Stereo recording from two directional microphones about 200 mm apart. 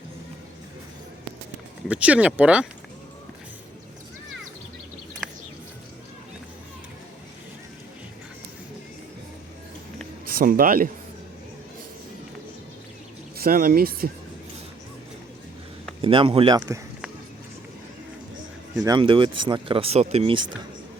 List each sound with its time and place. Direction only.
1.9 s speech: 5° right (ahead or behind)
10.2 s speech: 45° right (ahead or behind)
13.3 s speech: 50° right (ahead or behind)
16.0 s speech: 25° right (ahead or behind)
16.6 s speech: 15° right (ahead or behind)
18.8 s speech: 20° right (ahead or behind)